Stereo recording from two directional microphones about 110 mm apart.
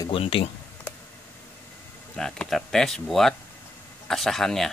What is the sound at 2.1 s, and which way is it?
Speech, 5° left (ahead or behind).